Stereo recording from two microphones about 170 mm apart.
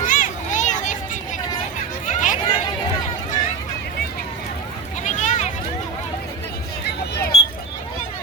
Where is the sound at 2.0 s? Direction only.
45° left (ahead or behind).